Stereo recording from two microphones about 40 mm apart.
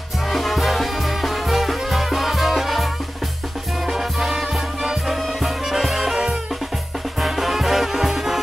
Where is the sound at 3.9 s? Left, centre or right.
Centre.